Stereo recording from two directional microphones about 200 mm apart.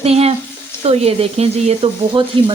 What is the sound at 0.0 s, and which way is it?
Speech, 30° right (ahead or behind).